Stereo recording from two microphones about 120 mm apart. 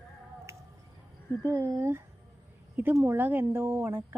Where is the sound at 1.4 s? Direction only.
25° right (ahead or behind).